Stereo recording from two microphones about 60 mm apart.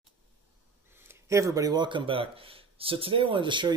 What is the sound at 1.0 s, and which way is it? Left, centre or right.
Speech, right.